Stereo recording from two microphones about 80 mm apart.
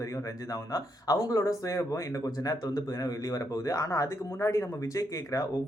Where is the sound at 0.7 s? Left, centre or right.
Left.